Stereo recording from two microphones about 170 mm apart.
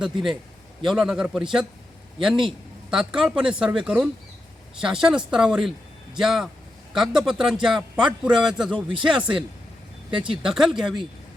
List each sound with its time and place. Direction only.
0.0 s a man's voice: centre (ahead or behind)
2.9 s a man's voice: 5° right (ahead or behind)
10.1 s speech: 30° right (ahead or behind)
10.4 s a man's voice: centre (ahead or behind)